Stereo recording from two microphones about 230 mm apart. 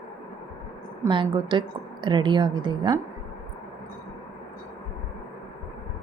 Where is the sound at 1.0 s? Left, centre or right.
Right.